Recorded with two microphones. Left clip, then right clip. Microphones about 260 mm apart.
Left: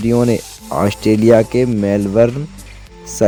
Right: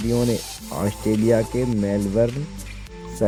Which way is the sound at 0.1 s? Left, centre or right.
Left.